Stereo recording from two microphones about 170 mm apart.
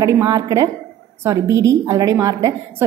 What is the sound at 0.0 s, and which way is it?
A woman's voice, 20° right (ahead or behind).